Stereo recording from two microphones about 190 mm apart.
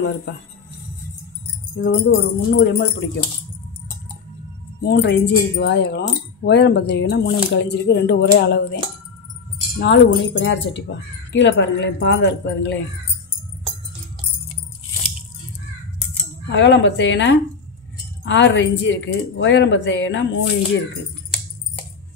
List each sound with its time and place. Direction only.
1.8 s speech: 65° left (ahead or behind)
4.8 s speech: 60° left (ahead or behind)
16.4 s speech: 70° left (ahead or behind)